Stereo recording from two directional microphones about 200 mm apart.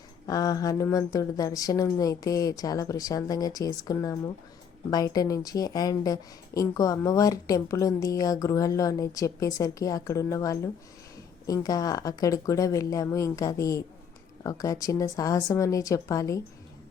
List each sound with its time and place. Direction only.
0.3 s speech: 15° left (ahead or behind)